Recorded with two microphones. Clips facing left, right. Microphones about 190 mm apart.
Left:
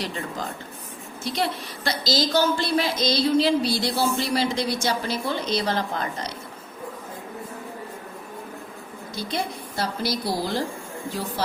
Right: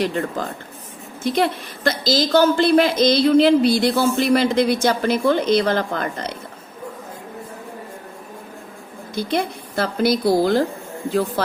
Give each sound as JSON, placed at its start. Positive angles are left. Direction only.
{"t": 0.0, "sound": "a woman's voice", "side_deg": -55}
{"t": 9.1, "sound": "a woman's voice", "side_deg": -55}